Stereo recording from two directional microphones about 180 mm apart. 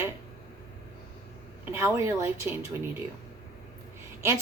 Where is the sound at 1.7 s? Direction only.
15° right (ahead or behind).